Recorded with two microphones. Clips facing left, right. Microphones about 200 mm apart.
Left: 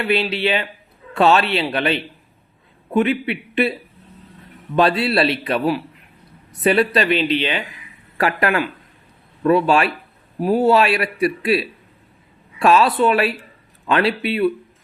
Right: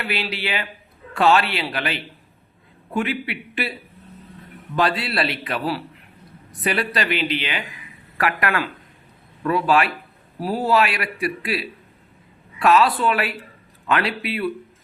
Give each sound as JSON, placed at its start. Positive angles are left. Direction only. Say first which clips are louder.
{"t": 0.0, "sound": "speech", "louder": "left 8 dB", "side_deg": 25}